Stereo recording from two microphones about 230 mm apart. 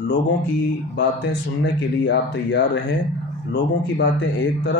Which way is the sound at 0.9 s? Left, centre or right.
Left.